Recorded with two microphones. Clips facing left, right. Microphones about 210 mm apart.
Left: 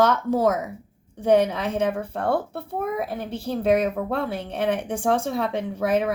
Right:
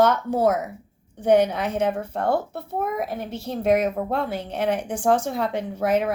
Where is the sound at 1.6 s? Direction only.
30° left (ahead or behind).